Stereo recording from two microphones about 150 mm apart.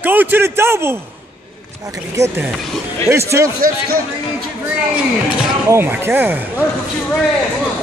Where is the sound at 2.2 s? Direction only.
20° right (ahead or behind).